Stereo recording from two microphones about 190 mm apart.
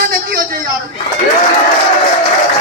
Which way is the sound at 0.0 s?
50° right (ahead or behind).